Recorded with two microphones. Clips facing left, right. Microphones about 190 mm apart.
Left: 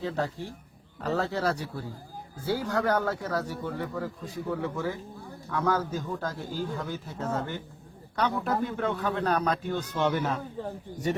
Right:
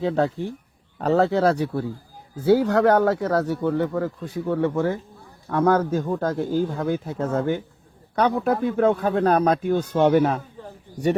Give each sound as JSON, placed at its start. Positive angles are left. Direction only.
{"t": 0.9, "sound": "a man's voice", "side_deg": -65}